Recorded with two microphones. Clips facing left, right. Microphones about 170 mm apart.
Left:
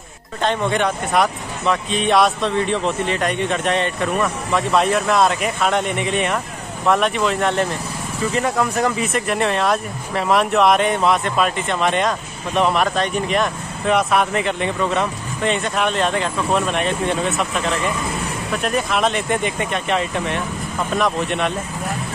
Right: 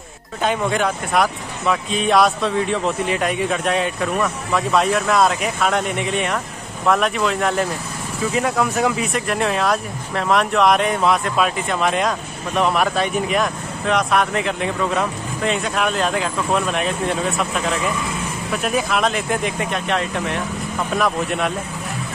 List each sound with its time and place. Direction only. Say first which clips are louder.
0.4 s speech: even; 5° right (ahead or behind)